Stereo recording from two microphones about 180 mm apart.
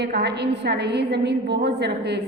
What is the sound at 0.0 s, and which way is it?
A woman's voice, 65° right (ahead or behind).